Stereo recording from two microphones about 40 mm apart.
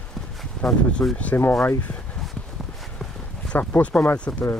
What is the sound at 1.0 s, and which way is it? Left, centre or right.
Speech, left.